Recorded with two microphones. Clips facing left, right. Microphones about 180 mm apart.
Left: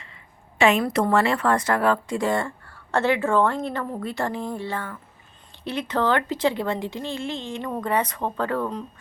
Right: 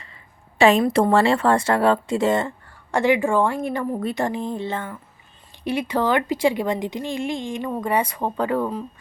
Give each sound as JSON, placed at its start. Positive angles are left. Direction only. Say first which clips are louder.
{"t": 0.6, "sound": "a woman's voice", "louder": "right 4 dB", "side_deg": -30}
{"t": 5.6, "sound": "a woman's voice", "louder": "right 2 dB", "side_deg": -10}